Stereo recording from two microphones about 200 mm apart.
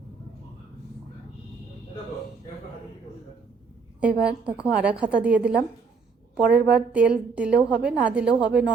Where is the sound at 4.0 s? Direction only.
5° right (ahead or behind).